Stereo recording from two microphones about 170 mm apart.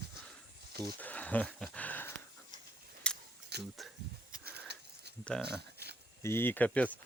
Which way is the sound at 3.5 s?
75° right (ahead or behind).